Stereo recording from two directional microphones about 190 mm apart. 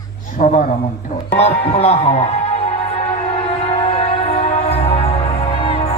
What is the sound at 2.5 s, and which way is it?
Music, 35° left (ahead or behind).